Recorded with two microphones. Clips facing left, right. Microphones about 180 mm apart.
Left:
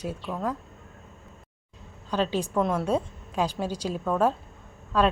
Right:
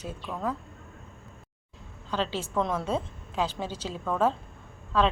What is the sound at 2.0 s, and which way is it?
A woman's voice, 15° left (ahead or behind).